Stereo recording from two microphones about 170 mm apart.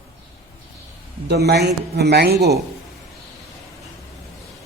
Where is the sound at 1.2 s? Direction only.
70° right (ahead or behind).